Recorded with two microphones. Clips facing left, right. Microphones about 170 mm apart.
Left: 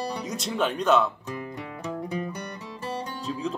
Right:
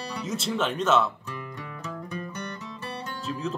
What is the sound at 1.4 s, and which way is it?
Music, 20° left (ahead or behind).